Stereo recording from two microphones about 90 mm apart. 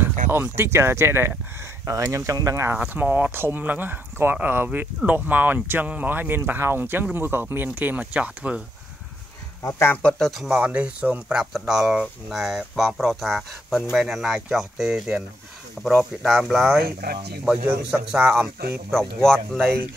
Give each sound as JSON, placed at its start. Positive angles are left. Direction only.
{"t": 0.0, "sound": "speech", "side_deg": -25}
{"t": 2.8, "sound": "speech", "side_deg": -20}
{"t": 9.6, "sound": "speech", "side_deg": 35}
{"t": 10.0, "sound": "speech", "side_deg": 5}